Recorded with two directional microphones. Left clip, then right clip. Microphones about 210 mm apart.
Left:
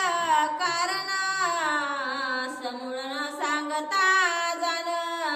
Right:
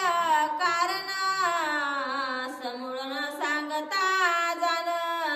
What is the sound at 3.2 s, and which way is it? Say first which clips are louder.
Music: left 1 dB; 15° right (ahead or behind).